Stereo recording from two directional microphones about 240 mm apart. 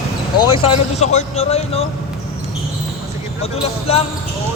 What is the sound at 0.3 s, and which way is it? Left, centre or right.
Speech, left.